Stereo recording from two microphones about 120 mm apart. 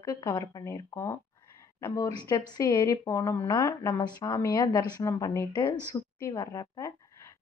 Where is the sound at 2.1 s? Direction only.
35° left (ahead or behind).